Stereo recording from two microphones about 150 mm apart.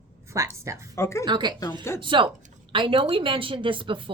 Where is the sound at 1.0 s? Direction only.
20° left (ahead or behind).